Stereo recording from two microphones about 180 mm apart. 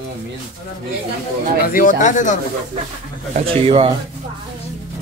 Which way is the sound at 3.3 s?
30° right (ahead or behind).